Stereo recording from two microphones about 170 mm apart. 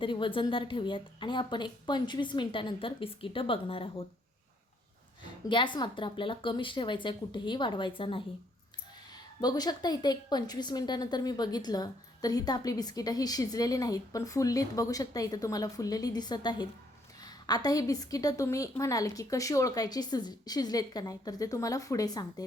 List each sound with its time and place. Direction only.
0.0 s a woman's voice: 30° left (ahead or behind)
5.2 s a woman's voice: 30° left (ahead or behind)